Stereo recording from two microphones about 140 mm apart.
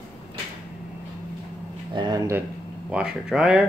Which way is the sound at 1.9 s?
30° right (ahead or behind).